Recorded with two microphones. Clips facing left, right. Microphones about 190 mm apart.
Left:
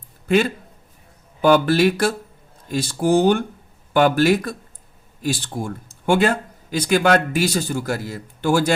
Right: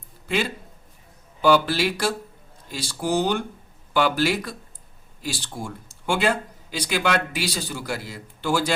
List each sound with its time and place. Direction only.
0.3 s speech: 50° left (ahead or behind)